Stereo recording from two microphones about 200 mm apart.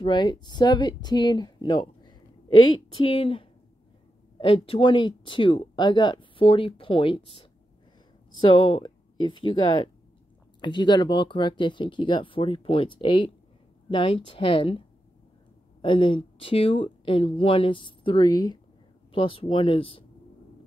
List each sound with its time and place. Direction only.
0.0 s speech: 20° left (ahead or behind)
4.6 s speech: 25° left (ahead or behind)
15.8 s speech: 25° left (ahead or behind)